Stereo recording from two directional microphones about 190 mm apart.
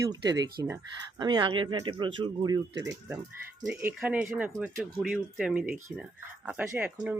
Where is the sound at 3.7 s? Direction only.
5° right (ahead or behind).